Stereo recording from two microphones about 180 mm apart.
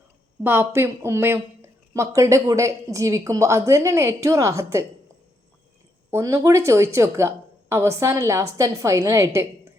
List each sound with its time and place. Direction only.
0.4 s a woman's voice: 10° right (ahead or behind)
6.1 s a woman's voice: 15° right (ahead or behind)